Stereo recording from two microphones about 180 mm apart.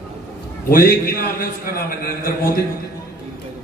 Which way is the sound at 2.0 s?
55° left (ahead or behind).